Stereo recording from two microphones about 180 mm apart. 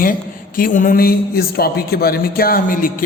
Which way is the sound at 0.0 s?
50° left (ahead or behind).